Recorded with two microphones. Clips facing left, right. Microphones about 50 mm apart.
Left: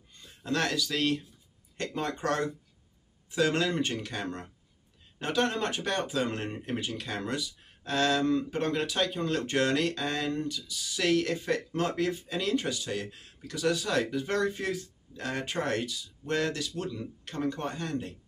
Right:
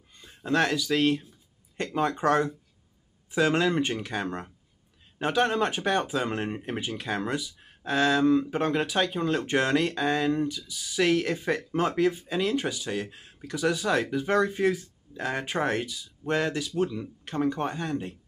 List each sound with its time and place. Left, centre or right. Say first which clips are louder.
0.2 s speech: right 5 dB; right